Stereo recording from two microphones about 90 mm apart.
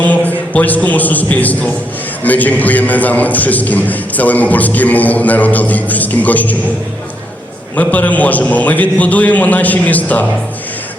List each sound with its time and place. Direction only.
0.5 s a man's voice: 15° left (ahead or behind)
7.8 s a man's voice: 15° left (ahead or behind)